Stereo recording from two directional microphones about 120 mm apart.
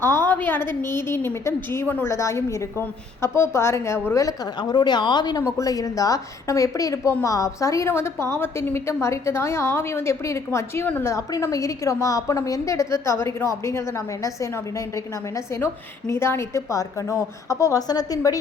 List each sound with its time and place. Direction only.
0.0 s a woman's voice: 20° left (ahead or behind)
4.7 s a woman's voice: 40° left (ahead or behind)
15.6 s a woman's voice: 20° left (ahead or behind)